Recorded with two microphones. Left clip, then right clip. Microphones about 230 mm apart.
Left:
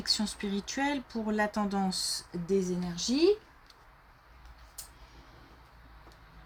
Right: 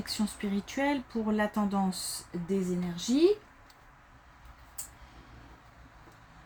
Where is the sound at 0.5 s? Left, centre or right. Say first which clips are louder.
Right 2 dB; left.